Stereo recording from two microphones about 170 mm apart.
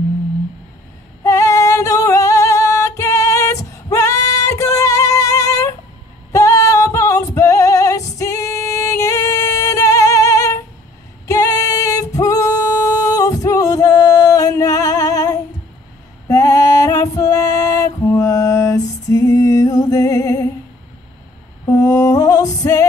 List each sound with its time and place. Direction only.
1.2 s music: 15° left (ahead or behind)
11.2 s singing: 20° left (ahead or behind)
16.3 s music: 20° left (ahead or behind)
21.6 s music: 20° left (ahead or behind)